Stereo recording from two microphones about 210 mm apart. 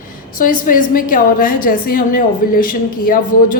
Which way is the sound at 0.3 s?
40° left (ahead or behind).